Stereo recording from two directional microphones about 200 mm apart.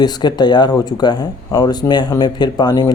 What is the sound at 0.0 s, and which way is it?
Speech, 20° left (ahead or behind).